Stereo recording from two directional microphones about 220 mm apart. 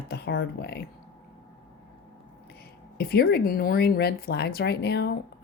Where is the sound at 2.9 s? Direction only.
45° left (ahead or behind).